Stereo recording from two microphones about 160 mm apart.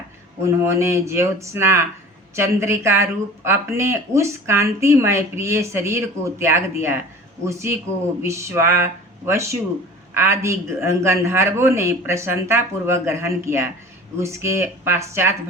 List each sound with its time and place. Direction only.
0.4 s speech: 15° right (ahead or behind)